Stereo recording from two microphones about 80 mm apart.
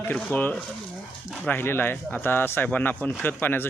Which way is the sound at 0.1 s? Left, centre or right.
Left.